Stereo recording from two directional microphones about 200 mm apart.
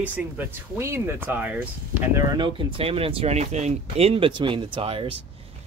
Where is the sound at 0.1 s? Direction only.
10° right (ahead or behind).